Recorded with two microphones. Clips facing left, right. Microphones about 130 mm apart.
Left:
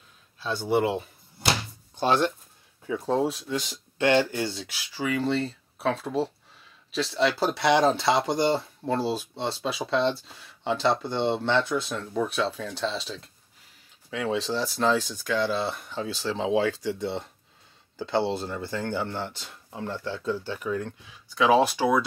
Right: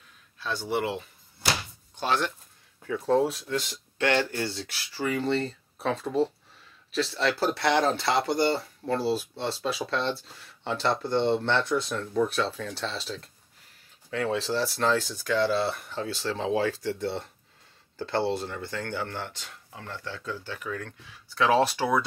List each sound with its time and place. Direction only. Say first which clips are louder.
0.6 s speech: left 5 dB; 20° left (ahead or behind)
18.2 s speech: even; 25° left (ahead or behind); by 22.0 s 10° left (ahead or behind)